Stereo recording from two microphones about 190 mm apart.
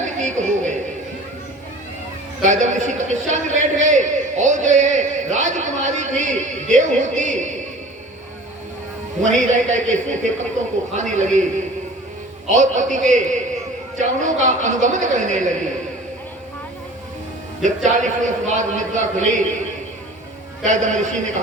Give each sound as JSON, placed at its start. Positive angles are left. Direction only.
{"t": 0.0, "sound": "a sound", "side_deg": -40}
{"t": 2.4, "sound": "a man's voice", "side_deg": -40}
{"t": 9.2, "sound": "a man's voice", "side_deg": -40}
{"t": 12.5, "sound": "a man's voice", "side_deg": -40}
{"t": 17.8, "sound": "a man's voice", "side_deg": -40}
{"t": 20.7, "sound": "a man's voice", "side_deg": -40}